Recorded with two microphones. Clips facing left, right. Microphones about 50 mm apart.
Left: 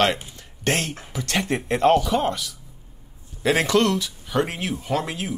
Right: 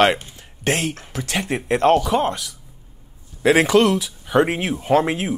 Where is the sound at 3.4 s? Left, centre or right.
Centre.